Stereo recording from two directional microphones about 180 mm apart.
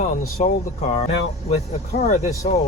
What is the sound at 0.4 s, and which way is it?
Speech, 40° left (ahead or behind).